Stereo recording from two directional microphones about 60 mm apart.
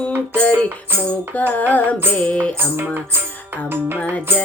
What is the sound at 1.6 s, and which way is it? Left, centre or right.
Child singing, left.